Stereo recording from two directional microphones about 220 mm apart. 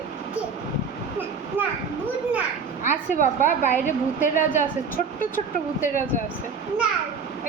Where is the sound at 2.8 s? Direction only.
35° left (ahead or behind).